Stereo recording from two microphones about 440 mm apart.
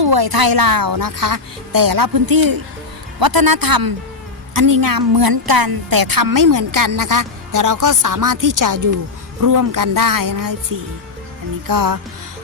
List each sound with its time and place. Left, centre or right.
0.0 s a woman's voice: right